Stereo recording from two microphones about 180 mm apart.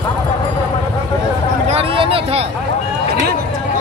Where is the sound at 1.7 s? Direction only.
30° right (ahead or behind).